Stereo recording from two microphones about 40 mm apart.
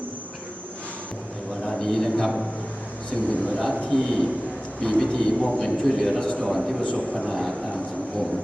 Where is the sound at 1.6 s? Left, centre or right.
Centre.